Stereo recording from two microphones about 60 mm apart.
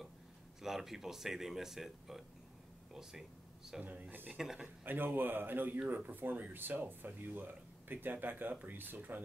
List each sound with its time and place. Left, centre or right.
0.6 s speech: centre
3.8 s speech: right
4.3 s speech: centre
4.8 s speech: right